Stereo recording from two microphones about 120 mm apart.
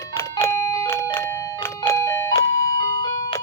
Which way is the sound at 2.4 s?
25° left (ahead or behind).